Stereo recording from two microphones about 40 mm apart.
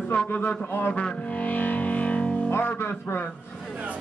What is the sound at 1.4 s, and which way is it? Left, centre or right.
Music, left.